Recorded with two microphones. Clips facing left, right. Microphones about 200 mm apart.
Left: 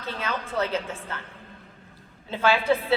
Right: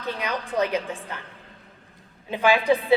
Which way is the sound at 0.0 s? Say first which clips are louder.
Right 2 dB; 15° right (ahead or behind).